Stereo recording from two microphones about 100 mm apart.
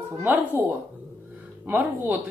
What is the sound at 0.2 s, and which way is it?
A man's voice, 20° right (ahead or behind).